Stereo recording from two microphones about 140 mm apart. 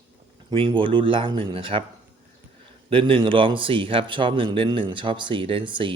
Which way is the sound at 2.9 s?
40° right (ahead or behind).